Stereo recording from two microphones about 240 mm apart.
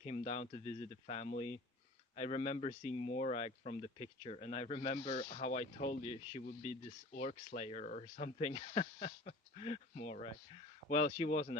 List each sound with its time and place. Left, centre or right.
0.0 s speech: left